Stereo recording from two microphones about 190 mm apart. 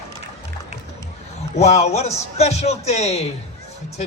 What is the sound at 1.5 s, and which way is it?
A man's voice, 35° left (ahead or behind).